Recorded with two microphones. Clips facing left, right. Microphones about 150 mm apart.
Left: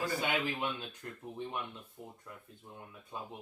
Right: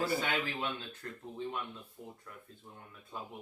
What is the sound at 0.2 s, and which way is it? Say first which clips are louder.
Speech: left 1 dB; 15° left (ahead or behind).